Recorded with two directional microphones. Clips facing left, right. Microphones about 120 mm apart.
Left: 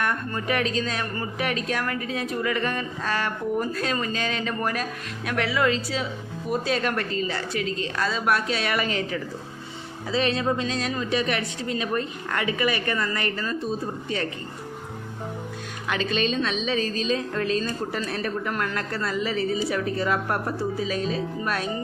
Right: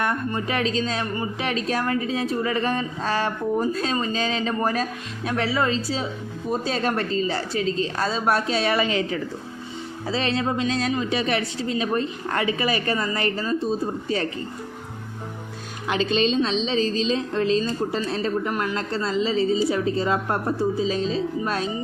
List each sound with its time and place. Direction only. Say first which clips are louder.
0.0 s a woman's voice: right 2 dB; 25° right (ahead or behind)
10.1 s a woman's voice: even; 30° right (ahead or behind)
15.9 s speech: right 4 dB; 30° right (ahead or behind)